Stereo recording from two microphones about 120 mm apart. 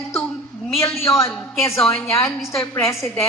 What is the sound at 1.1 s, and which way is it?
A woman's voice, 20° left (ahead or behind).